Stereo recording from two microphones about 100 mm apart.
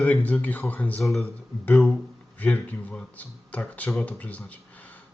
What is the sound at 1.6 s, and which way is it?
Speech, 15° left (ahead or behind).